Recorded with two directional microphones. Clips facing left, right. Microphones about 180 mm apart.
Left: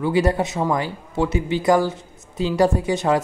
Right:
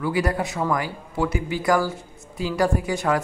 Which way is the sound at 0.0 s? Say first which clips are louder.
Left 4 dB; 25° left (ahead or behind).